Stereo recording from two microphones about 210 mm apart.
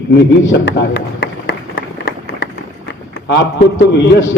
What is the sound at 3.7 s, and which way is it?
Speech, 60° left (ahead or behind).